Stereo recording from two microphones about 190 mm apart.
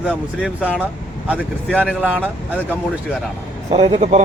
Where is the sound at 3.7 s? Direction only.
35° right (ahead or behind).